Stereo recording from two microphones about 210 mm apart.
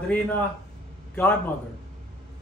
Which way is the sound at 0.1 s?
5° left (ahead or behind).